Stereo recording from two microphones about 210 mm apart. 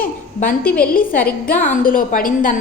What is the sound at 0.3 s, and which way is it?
A woman's voice, 40° left (ahead or behind).